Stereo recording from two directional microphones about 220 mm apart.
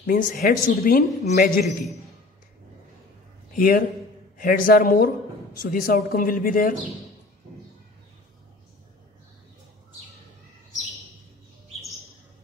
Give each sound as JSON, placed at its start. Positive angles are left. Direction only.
{"t": 0.0, "sound": "speech", "side_deg": 40}
{"t": 3.5, "sound": "speech", "side_deg": 40}